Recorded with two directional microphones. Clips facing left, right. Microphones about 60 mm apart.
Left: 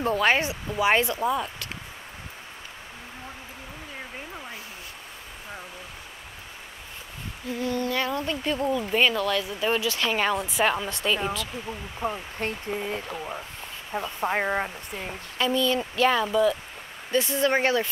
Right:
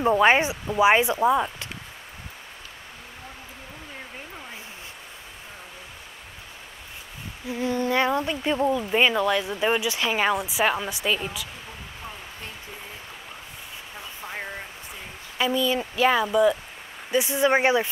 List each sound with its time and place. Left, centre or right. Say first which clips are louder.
0.0 s speech: right 4 dB; centre
7.4 s speech: right 2 dB; centre
12.0 s speech: left 11 dB; left
13.9 s speech: left 10 dB; left
15.3 s speech: even; centre